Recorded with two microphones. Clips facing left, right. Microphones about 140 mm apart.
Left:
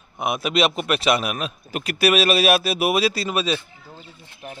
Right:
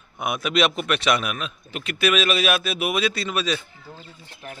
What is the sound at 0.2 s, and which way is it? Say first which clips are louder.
A man's voice: left 1 dB; 30° left (ahead or behind).